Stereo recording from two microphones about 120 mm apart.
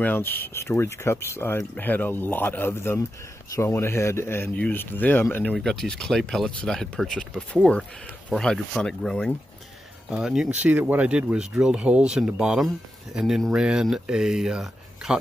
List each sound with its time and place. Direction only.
0.0 s speech: 15° left (ahead or behind)
5.4 s speech: 5° left (ahead or behind)
10.1 s speech: 5° right (ahead or behind)